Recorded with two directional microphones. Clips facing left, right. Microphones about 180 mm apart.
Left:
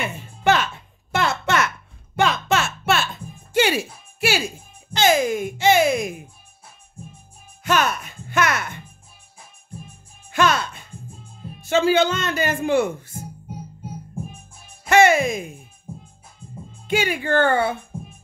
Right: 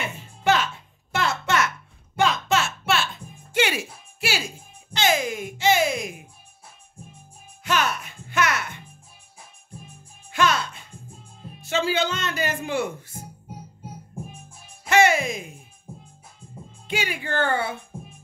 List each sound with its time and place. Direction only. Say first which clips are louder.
1.1 s a sound: left 3 dB; 60° left (ahead or behind)
3.5 s music: left 4 dB; 35° left (ahead or behind)
4.9 s music: left 5 dB; 45° left (ahead or behind)
7.6 s music: left 4 dB; 45° left (ahead or behind)
10.3 s music: left 3 dB; 50° left (ahead or behind)
11.7 s a sound: left 6 dB; 50° left (ahead or behind)
14.9 s music: left 4 dB; 50° left (ahead or behind)
16.8 s music: left 6 dB; 50° left (ahead or behind)